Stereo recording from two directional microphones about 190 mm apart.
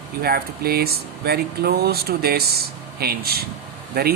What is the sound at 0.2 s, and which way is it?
Speech, 55° right (ahead or behind).